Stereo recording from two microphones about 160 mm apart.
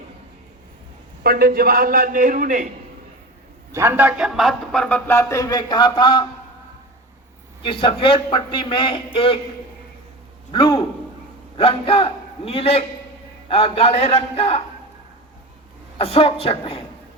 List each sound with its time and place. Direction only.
1.2 s a man's voice: 70° right (ahead or behind)
3.7 s a man's voice: 15° right (ahead or behind); by 6.2 s 30° left (ahead or behind)
7.6 s a man's voice: 35° left (ahead or behind)
10.5 s a man's voice: 30° left (ahead or behind)
16.0 s a man's voice: 35° left (ahead or behind)